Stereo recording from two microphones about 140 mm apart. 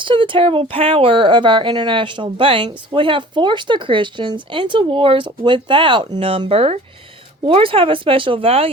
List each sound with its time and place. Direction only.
0.0 s speech: 35° right (ahead or behind)